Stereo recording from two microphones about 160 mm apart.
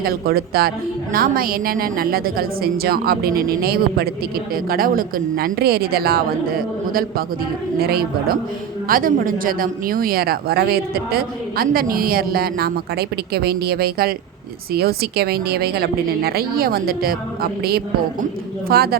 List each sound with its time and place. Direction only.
0.0 s speech: 70° right (ahead or behind)
8.9 s speech: 60° right (ahead or behind)